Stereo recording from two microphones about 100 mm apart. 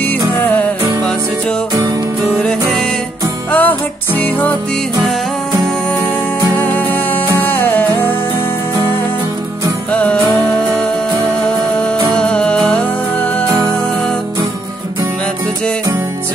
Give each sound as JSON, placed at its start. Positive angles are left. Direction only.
{"t": 3.5, "sound": "music", "side_deg": 15}
{"t": 7.3, "sound": "music", "side_deg": 20}
{"t": 12.2, "sound": "music", "side_deg": 10}